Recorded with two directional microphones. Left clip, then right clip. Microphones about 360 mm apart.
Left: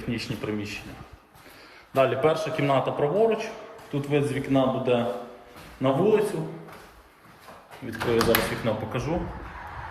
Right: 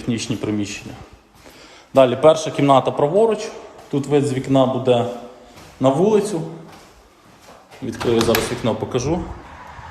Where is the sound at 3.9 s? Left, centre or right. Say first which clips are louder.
Right 8 dB; right.